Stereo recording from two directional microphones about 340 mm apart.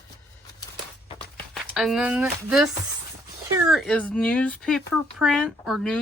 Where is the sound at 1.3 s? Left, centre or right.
Centre.